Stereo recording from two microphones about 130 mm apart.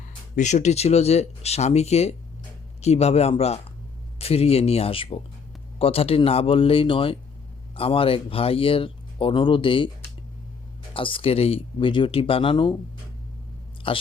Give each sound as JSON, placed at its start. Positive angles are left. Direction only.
{"t": 0.3, "sound": "speech", "side_deg": 65}
{"t": 10.9, "sound": "speech", "side_deg": 40}
{"t": 13.8, "sound": "speech", "side_deg": 40}